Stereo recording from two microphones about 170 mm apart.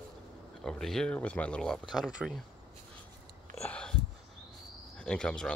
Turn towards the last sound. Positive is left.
turn(degrees=5)  # may be behind; listen again after turning